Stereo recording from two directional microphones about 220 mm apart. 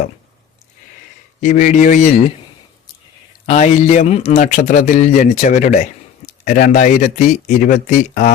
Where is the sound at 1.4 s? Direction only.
35° left (ahead or behind).